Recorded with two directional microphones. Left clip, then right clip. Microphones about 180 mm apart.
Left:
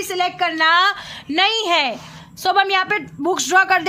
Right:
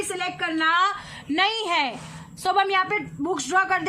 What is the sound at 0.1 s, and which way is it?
A woman's voice, 60° left (ahead or behind).